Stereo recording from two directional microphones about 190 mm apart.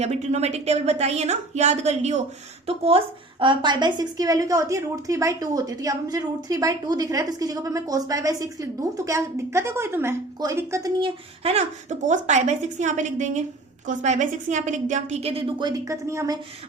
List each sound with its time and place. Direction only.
0.0 s a woman's voice: 35° right (ahead or behind); by 11.1 s 20° right (ahead or behind)
11.4 s a woman's voice: 35° right (ahead or behind); by 16.4 s 15° right (ahead or behind)